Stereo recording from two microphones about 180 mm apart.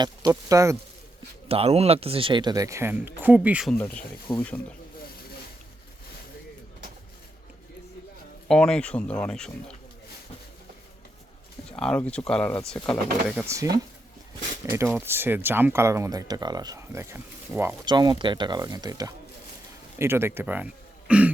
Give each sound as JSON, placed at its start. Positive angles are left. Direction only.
{"t": 0.0, "sound": "speech", "side_deg": -20}
{"t": 1.5, "sound": "speech", "side_deg": -35}
{"t": 3.8, "sound": "speech", "side_deg": 10}
{"t": 8.4, "sound": "speech", "side_deg": 5}
{"t": 11.8, "sound": "speech", "side_deg": 5}
{"t": 13.2, "sound": "speech", "side_deg": -10}
{"t": 14.9, "sound": "speech", "side_deg": -10}
{"t": 17.8, "sound": "speech", "side_deg": -25}
{"t": 21.1, "sound": "throat clearing", "side_deg": -5}